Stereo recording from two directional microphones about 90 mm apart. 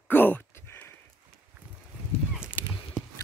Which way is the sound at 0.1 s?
20° left (ahead or behind).